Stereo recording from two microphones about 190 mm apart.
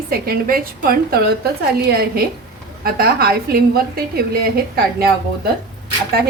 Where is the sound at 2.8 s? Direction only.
55° right (ahead or behind).